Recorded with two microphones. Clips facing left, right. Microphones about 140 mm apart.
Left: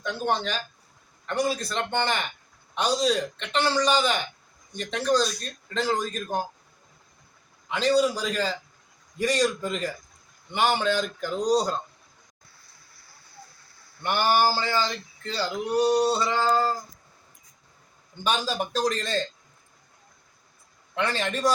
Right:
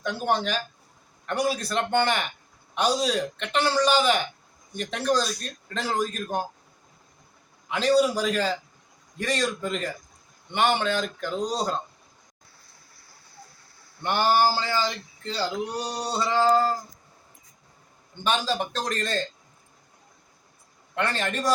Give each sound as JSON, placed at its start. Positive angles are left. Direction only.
{"t": 0.0, "sound": "a man's voice", "side_deg": -5}
{"t": 7.7, "sound": "a man's voice", "side_deg": -5}
{"t": 14.0, "sound": "a man's voice", "side_deg": 5}
{"t": 14.5, "sound": "speech", "side_deg": -15}
{"t": 16.3, "sound": "a man's voice", "side_deg": -5}
{"t": 18.2, "sound": "a man's voice", "side_deg": 5}
{"t": 20.9, "sound": "a man's voice", "side_deg": 0}